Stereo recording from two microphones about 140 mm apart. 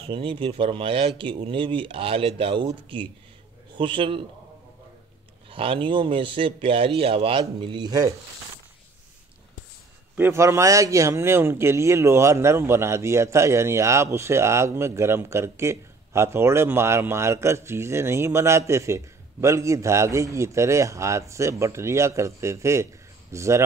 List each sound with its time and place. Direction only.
0.0 s speech: 40° right (ahead or behind)
5.5 s speech: 40° right (ahead or behind)
10.1 s speech: 15° right (ahead or behind)